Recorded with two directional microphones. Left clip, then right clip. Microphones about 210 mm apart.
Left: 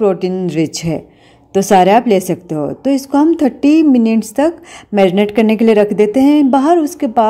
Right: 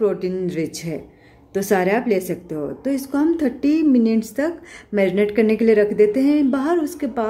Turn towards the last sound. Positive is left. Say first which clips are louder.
# left 9 dB
turn(degrees=35)  # may be behind; listen again after turning